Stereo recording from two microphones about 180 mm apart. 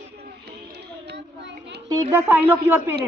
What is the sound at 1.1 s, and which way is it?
Child singing, 75° right (ahead or behind).